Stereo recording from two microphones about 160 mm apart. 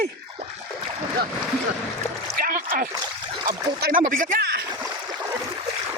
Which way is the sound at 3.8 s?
60° right (ahead or behind).